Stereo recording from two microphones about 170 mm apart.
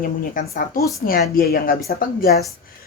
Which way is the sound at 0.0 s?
55° left (ahead or behind).